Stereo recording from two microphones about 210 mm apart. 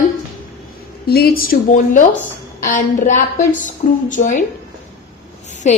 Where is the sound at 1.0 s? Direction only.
50° left (ahead or behind).